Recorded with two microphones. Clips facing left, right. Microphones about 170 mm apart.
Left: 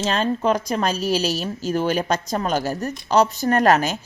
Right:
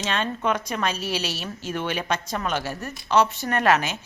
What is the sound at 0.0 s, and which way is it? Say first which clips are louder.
Speech: left 5 dB; 35° left (ahead or behind).